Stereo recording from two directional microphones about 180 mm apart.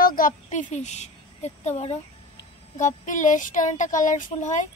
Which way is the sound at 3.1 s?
45° left (ahead or behind).